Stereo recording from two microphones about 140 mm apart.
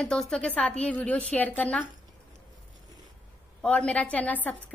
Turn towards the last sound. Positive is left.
turn(degrees=10)  # may be behind; listen again after turning